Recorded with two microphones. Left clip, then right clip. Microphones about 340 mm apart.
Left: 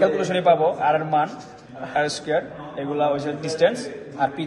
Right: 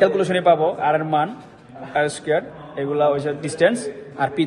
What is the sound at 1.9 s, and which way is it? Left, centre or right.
A man's voice, centre.